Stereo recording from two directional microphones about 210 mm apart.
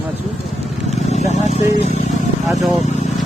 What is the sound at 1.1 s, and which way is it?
Speech, 35° left (ahead or behind).